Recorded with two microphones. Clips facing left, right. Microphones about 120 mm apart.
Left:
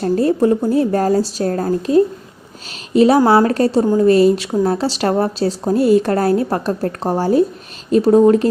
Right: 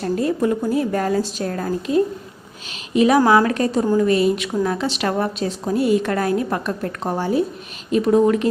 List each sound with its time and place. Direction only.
0.0 s a woman's voice: 35° left (ahead or behind)